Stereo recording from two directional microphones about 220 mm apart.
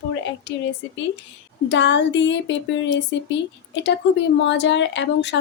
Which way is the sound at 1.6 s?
55° left (ahead or behind).